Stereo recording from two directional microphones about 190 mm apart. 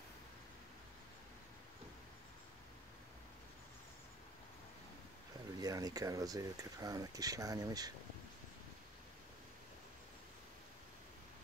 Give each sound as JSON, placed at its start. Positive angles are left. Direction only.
{"t": 5.6, "sound": "speech", "side_deg": -20}